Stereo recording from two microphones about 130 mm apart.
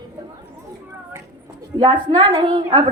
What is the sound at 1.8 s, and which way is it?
A woman's voice, 35° right (ahead or behind).